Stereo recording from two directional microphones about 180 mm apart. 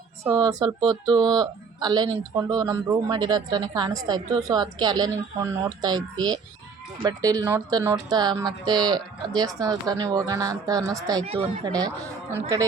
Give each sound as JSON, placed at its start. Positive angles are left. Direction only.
{"t": 0.3, "sound": "a woman's voice", "side_deg": -25}